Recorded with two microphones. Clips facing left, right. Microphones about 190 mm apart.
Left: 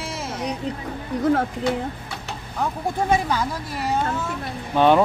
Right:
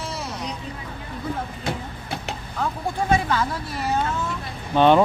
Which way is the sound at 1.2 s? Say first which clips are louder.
Left 10 dB; 80° left.